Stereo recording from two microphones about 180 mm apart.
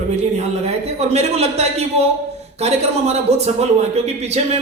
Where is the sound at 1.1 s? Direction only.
35° right (ahead or behind).